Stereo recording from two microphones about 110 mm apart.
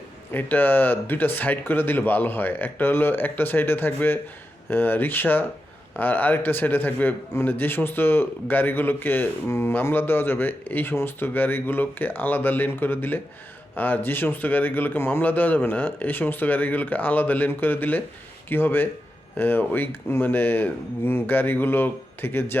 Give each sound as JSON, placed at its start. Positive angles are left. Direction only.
{"t": 0.3, "sound": "a man's voice", "side_deg": 15}